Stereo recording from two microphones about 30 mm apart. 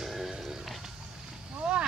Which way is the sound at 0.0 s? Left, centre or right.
Centre.